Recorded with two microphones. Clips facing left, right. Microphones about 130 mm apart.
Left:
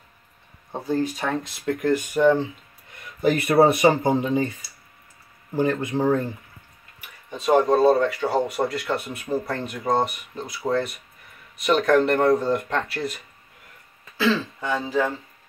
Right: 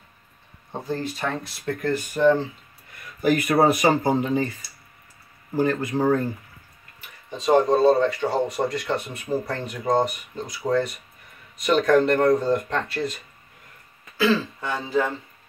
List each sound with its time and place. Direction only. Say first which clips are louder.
0.7 s speech: left 4 dB; 10° left (ahead or behind)
3.2 s speech: left 2 dB; 25° left (ahead or behind)
5.6 s speech: even; 20° left (ahead or behind)
7.2 s speech: even; 5° left (ahead or behind)